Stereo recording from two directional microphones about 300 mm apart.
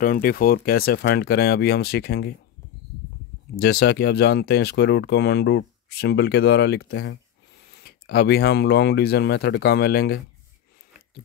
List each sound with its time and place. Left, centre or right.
0.0 s speech: left
3.5 s speech: left